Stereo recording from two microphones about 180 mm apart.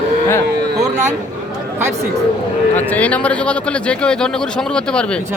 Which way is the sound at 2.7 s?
10° left (ahead or behind).